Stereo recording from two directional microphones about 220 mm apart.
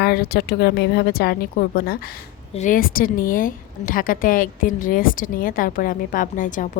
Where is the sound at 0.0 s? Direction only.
45° left (ahead or behind).